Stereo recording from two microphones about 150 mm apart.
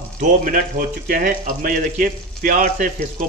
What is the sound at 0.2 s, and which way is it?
A man's voice, 65° right (ahead or behind).